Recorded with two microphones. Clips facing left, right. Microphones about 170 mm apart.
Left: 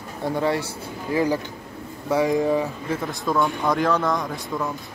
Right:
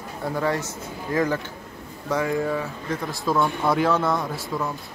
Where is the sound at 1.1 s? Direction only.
10° left (ahead or behind).